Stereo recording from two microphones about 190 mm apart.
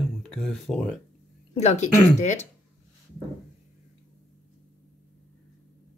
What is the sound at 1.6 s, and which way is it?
Speech, 40° left (ahead or behind).